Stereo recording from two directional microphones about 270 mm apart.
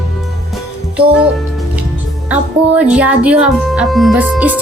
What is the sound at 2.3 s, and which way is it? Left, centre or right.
Speech, centre.